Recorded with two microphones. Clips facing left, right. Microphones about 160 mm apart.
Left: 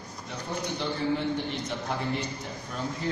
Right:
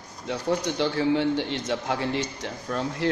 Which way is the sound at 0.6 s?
90° right.